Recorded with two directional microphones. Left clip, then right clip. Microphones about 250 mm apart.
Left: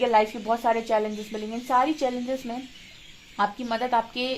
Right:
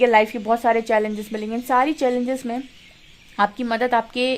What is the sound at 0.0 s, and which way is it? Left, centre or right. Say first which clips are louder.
A woman's voice: right 5 dB; right.